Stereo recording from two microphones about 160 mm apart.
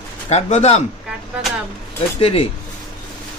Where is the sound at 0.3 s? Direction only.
45° left (ahead or behind).